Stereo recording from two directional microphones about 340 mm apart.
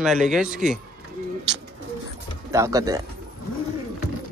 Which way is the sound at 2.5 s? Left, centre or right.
Centre.